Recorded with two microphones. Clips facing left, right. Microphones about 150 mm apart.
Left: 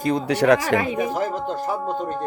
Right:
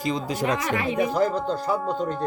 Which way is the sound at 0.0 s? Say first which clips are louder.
Left 6 dB; 65° left (ahead or behind).